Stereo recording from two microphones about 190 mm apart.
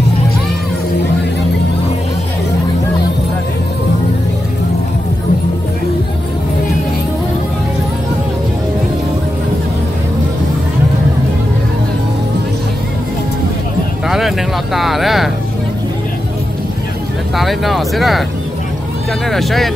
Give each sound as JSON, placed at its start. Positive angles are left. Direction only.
{"t": 14.0, "sound": "a sound", "side_deg": 0}
{"t": 17.4, "sound": "speech", "side_deg": 0}
{"t": 19.3, "sound": "speech", "side_deg": 0}